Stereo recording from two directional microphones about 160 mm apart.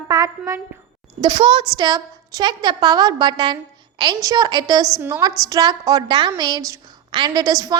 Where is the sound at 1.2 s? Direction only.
30° right (ahead or behind).